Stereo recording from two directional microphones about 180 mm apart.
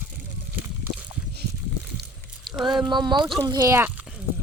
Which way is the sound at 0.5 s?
10° right (ahead or behind).